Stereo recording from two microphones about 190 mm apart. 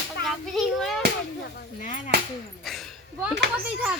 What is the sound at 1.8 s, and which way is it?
Speech, 40° left (ahead or behind).